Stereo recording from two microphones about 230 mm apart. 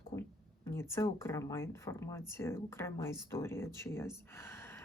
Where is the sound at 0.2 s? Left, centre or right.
Centre.